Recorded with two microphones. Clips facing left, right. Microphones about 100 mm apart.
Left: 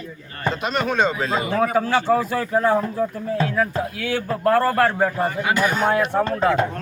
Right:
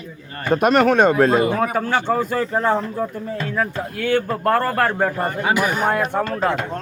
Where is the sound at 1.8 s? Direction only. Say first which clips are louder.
Left 1 dB; 5° left (ahead or behind).